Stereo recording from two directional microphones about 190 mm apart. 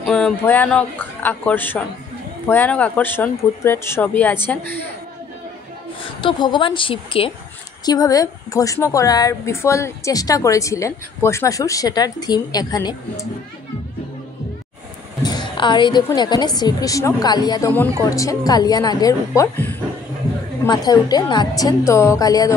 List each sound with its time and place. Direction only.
0.0 s a woman's voice: 5° left (ahead or behind)
6.2 s a woman's voice: 25° left (ahead or behind)
15.2 s a sound: 25° left (ahead or behind)
16.1 s a woman's voice: 20° left (ahead or behind)
20.6 s a woman's voice: 20° left (ahead or behind)